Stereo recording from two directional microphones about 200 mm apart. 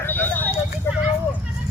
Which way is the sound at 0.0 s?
10° left (ahead or behind).